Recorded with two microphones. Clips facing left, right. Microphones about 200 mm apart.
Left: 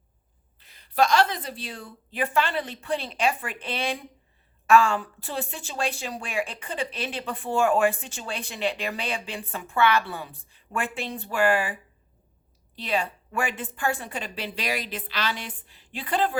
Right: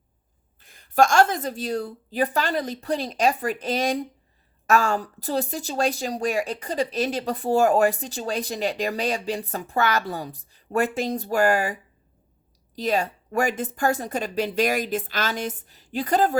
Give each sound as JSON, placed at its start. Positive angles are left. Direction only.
{"t": 0.6, "sound": "a woman's voice", "side_deg": -45}